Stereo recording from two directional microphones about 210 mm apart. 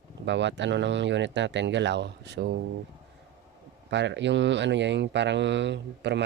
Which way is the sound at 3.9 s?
55° right (ahead or behind).